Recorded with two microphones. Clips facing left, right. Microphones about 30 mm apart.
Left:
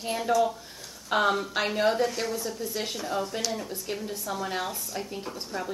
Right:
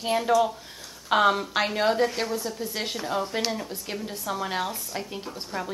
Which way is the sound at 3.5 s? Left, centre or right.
Centre.